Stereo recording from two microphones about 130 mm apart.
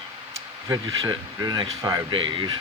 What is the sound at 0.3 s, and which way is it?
Speech, 30° right (ahead or behind).